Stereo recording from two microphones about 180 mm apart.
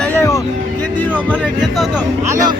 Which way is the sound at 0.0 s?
10° left (ahead or behind).